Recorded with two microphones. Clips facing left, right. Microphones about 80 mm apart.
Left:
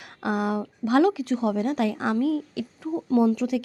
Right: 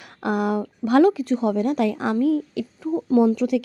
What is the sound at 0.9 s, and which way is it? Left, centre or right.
A woman's voice, right.